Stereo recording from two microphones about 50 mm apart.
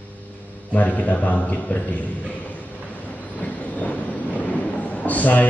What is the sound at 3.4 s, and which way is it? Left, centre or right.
Train, left.